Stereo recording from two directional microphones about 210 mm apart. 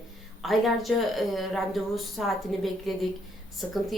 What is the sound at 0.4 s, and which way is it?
Speech, centre (ahead or behind).